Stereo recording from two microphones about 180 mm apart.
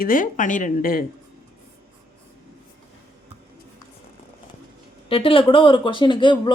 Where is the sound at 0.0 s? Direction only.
50° left (ahead or behind).